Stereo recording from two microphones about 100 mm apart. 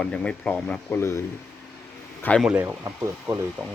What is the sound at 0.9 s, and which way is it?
Speech, 25° left (ahead or behind).